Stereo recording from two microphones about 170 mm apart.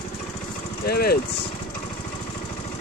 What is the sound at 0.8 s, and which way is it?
Speech, 65° left (ahead or behind).